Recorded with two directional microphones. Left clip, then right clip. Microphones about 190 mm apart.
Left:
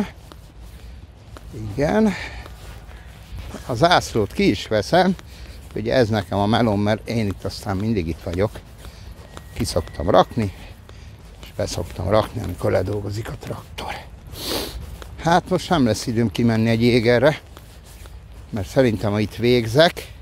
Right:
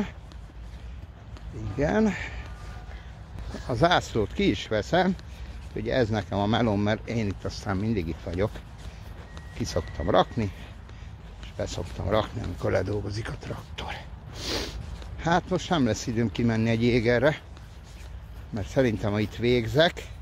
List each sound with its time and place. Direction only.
1.8 s speech: 30° left (ahead or behind)
3.6 s speech: 25° left (ahead or behind)
11.5 s speech: 40° left (ahead or behind)
12.8 s a sound: 25° left (ahead or behind)
15.1 s speech: 40° left (ahead or behind)
18.5 s speech: 40° left (ahead or behind)